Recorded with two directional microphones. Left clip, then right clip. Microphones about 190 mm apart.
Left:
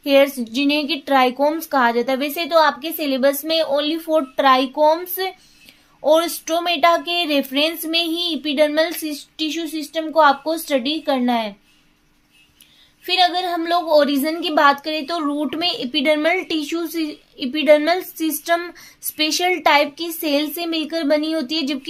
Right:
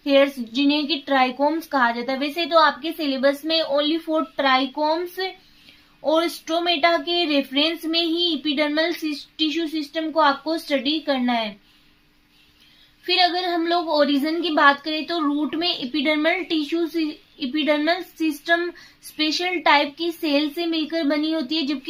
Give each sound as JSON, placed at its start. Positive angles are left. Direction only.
{"t": 0.0, "sound": "a woman's voice", "side_deg": 35}
{"t": 13.1, "sound": "a woman's voice", "side_deg": 30}